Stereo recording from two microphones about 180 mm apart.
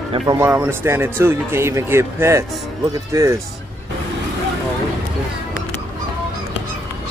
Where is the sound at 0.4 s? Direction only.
15° right (ahead or behind).